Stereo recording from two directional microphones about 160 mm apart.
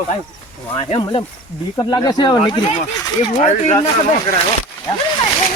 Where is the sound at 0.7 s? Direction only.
35° left (ahead or behind).